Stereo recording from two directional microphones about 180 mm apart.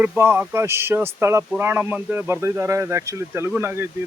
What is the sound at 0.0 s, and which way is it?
Speech, 10° right (ahead or behind).